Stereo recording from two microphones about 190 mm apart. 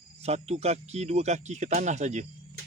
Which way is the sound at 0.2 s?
35° right (ahead or behind).